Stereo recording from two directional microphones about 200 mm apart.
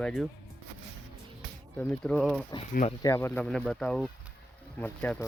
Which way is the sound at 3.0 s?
15° left (ahead or behind).